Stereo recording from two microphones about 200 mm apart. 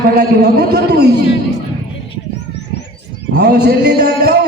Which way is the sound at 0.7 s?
55° right (ahead or behind).